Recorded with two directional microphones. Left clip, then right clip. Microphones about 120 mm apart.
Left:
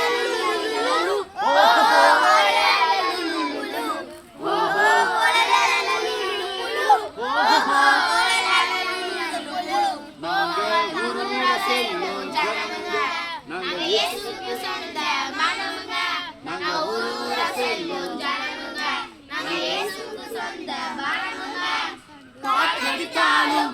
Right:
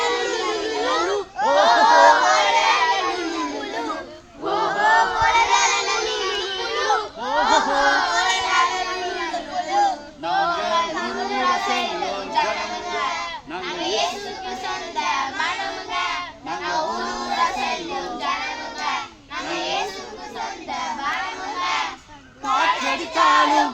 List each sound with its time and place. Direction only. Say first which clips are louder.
0.0 s music: even; 30° left (ahead or behind)
1.5 s crowd: right 1 dB; 25° left (ahead or behind)
3.0 s a sound: even; 15° left (ahead or behind)
4.4 s child singing: even; 30° left (ahead or behind); by 13.2 s centre (ahead or behind)
13.7 s a sound: left 1 dB; 5° left (ahead or behind)
14.7 s child singing: right 2 dB; 5° left (ahead or behind)
19.5 s children playing: right 1 dB; 5° right (ahead or behind)
20.4 s child singing: right 3 dB; 5° right (ahead or behind)
22.4 s a sound: right 1 dB; 5° right (ahead or behind)